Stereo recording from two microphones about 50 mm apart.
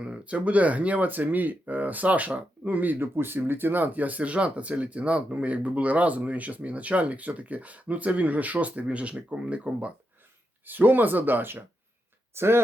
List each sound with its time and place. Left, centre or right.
0.0 s speech: right
10.7 s speech: right
12.3 s speech: right